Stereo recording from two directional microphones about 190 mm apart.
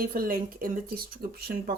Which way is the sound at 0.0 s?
50° right (ahead or behind).